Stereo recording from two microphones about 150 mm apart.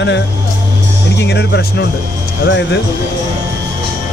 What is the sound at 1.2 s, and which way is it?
Speech, 90° left.